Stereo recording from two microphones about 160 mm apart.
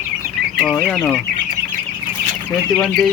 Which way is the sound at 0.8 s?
5° left (ahead or behind).